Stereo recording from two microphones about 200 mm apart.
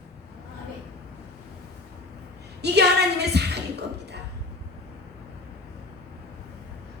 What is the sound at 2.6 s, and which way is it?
Speech, 55° right (ahead or behind).